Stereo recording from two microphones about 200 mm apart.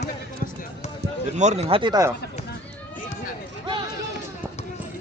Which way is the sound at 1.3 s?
35° right (ahead or behind).